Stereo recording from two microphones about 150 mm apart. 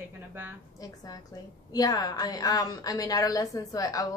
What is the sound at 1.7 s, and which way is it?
A woman's voice, 25° left (ahead or behind).